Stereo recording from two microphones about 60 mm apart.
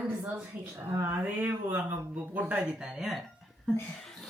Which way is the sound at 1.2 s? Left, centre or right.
Right.